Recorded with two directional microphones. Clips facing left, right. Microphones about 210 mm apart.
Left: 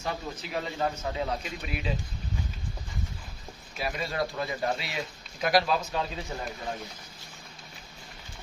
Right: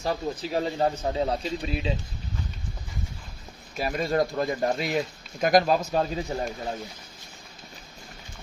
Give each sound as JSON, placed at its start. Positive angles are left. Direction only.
{"t": 0.0, "sound": "speech", "side_deg": -35}
{"t": 3.8, "sound": "speech", "side_deg": -45}